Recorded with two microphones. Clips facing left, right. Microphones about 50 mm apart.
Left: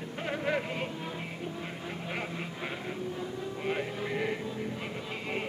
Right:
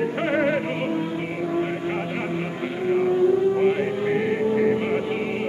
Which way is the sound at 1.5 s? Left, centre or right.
Right.